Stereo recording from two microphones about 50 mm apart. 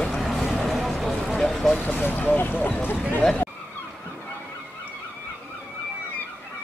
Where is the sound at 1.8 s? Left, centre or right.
Left.